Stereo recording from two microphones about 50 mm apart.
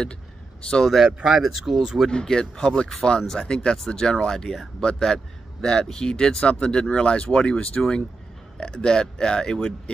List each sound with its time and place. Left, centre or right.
0.6 s a man's voice: centre
0.8 s speech: centre
2.0 s speech: centre